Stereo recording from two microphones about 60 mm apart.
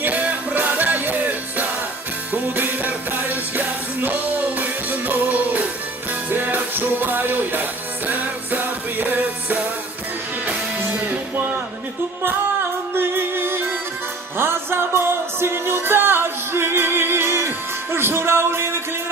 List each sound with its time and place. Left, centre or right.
0.0 s music: right
12.9 s music: right